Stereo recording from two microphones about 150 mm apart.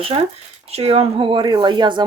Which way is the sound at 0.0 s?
40° right (ahead or behind).